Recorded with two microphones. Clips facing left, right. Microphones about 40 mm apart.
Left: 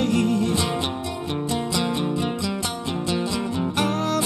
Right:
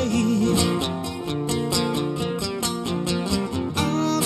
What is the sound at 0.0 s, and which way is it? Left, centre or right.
Music, left.